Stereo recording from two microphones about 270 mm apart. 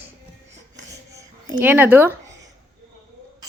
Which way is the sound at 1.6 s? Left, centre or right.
Centre.